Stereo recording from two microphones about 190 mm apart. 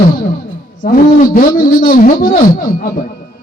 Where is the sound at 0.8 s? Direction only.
45° left (ahead or behind).